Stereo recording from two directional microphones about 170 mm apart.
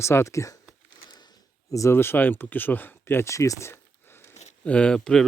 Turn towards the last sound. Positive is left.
turn(degrees=5)  # may be behind; listen again after turning